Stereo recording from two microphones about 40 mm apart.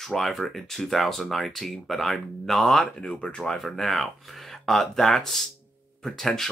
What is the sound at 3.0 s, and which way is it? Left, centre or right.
Speech, left.